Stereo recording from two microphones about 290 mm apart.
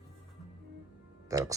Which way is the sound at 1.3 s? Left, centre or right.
Centre.